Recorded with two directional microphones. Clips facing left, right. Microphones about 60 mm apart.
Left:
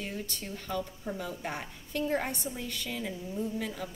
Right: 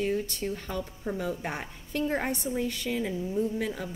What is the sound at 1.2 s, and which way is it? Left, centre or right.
Speech, right.